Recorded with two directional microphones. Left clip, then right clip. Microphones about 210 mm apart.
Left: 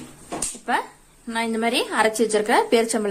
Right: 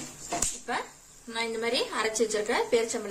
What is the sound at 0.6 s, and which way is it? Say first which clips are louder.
A woman's voice: left 9 dB; 40° left (ahead or behind).